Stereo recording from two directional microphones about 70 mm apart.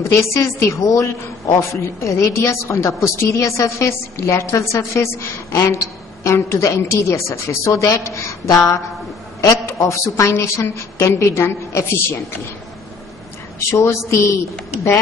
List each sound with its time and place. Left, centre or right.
0.0 s a woman's voice: left
13.7 s a woman's voice: left